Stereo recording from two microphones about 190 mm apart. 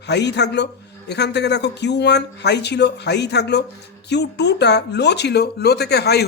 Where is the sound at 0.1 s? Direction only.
60° left (ahead or behind).